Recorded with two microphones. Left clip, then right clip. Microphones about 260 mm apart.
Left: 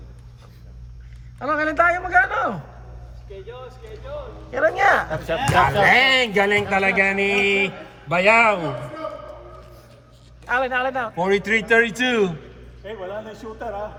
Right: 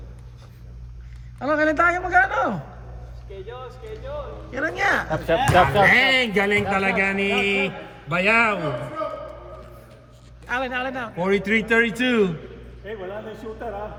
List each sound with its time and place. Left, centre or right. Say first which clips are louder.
1.4 s a man's voice: even; centre
4.5 s a man's voice: left 5 dB; centre
5.1 s speech: right 2 dB; right
5.8 s speech: left 1 dB; left
10.4 s a man's voice: left 4 dB; centre
11.2 s speech: left 1 dB; left